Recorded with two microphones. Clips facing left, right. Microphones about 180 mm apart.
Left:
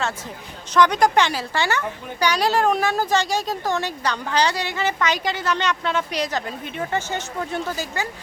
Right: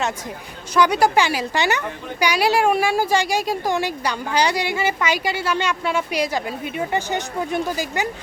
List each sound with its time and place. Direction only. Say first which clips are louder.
0.7 s a woman's voice: even; 10° right (ahead or behind)